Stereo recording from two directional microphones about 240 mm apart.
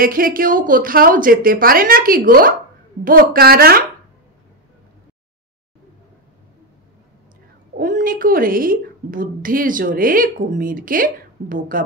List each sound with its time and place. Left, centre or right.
0.0 s a woman's voice: right
7.7 s a woman's voice: right